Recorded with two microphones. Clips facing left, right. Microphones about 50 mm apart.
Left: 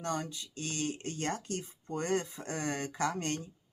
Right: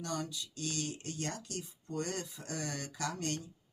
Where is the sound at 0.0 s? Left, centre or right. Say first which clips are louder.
Left 3 dB; left.